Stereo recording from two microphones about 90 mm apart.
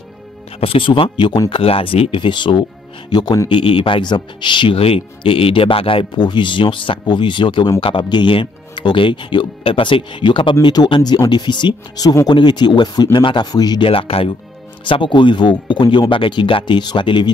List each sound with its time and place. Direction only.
0.6 s speech: 80° left; by 3.3 s 50° left (ahead or behind)
3.4 s speech: 75° left (ahead or behind)
10.7 s speech: 50° left (ahead or behind)
13.8 s speech: 90° left
14.9 s speech: 65° left (ahead or behind)